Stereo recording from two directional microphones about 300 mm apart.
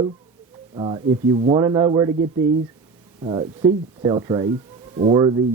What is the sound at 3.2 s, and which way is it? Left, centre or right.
Speech, centre.